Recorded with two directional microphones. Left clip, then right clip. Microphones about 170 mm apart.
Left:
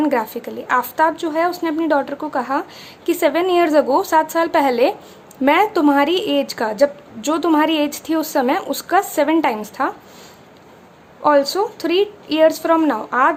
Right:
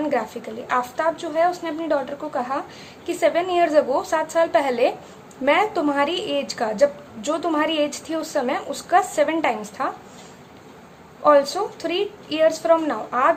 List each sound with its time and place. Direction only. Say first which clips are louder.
0.0 s a woman's voice: left 5 dB; 40° left (ahead or behind)
11.2 s a woman's voice: left 2 dB; 35° left (ahead or behind)